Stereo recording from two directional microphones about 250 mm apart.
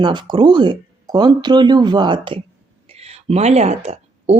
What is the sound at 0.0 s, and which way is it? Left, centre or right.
A woman's voice, centre.